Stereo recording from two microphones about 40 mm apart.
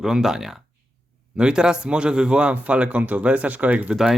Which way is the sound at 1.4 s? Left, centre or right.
Right.